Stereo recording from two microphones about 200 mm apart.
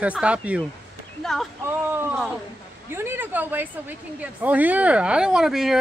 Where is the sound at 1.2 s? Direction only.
Centre (ahead or behind).